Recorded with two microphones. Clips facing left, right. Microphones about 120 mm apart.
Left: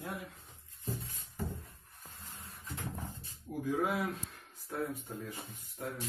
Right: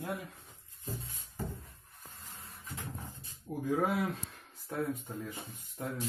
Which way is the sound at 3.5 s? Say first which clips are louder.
Right 1 dB; 30° right (ahead or behind).